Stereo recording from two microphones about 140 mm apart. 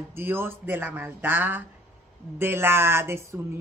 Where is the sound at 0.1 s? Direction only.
15° right (ahead or behind).